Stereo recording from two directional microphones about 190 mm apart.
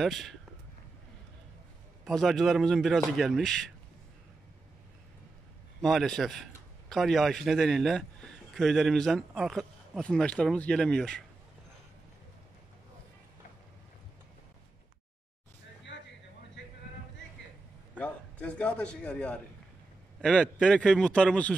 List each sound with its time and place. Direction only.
0.0 s a man's voice: centre (ahead or behind)
2.0 s a man's voice: centre (ahead or behind)
5.8 s a man's voice: centre (ahead or behind)
15.9 s vehicle: 70° left (ahead or behind)
16.6 s a sound: 70° left (ahead or behind)
17.9 s a man's voice: 5° left (ahead or behind)